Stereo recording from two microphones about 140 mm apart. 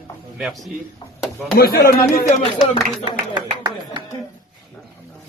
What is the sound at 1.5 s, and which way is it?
Speech, 90° left.